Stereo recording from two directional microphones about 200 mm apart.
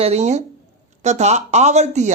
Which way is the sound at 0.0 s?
35° right (ahead or behind).